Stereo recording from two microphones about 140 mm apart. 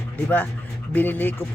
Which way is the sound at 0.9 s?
15° left (ahead or behind).